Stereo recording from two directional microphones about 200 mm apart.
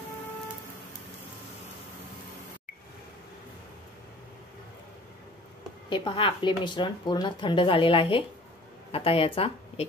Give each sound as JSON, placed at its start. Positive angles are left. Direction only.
{"t": 5.9, "sound": "speech", "side_deg": 25}